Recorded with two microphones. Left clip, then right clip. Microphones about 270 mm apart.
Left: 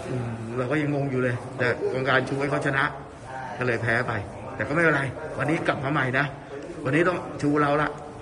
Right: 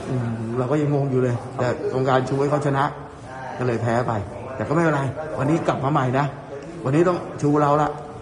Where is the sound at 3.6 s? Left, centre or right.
Centre.